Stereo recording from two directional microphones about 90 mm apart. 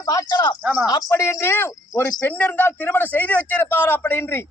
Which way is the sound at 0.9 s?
40° left (ahead or behind).